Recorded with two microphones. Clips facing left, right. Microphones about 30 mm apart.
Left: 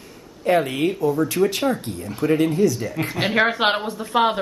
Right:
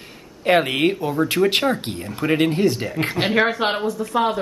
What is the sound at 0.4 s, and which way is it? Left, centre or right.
A man's voice, right.